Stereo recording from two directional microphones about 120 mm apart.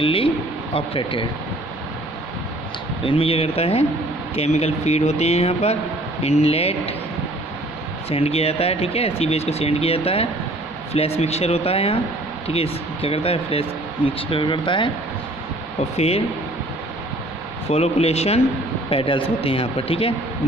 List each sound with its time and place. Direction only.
0.0 s a man's voice: 50° left (ahead or behind)
3.0 s speech: 50° left (ahead or behind)
8.1 s speech: 55° left (ahead or behind)
16.0 s speech: 55° left (ahead or behind)
17.7 s speech: 60° left (ahead or behind)
18.9 s speech: 45° left (ahead or behind)